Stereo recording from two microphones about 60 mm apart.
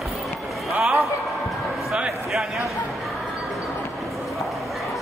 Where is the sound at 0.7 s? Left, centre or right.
Centre.